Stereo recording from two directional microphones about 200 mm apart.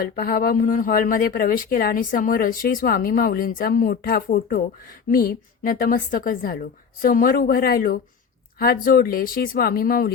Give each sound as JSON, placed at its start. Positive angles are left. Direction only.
{"t": 0.0, "sound": "speech", "side_deg": 45}